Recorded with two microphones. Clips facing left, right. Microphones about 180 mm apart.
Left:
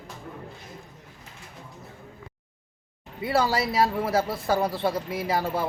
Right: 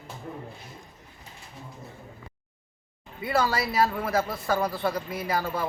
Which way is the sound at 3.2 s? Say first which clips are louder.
Left 2 dB; 25° left (ahead or behind).